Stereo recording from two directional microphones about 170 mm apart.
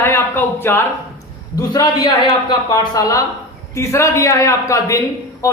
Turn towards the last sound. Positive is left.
turn(degrees=20)  # may be behind; listen again after turning